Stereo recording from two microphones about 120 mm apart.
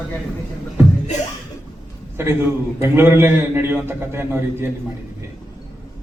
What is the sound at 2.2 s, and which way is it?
A man's voice, 20° right (ahead or behind).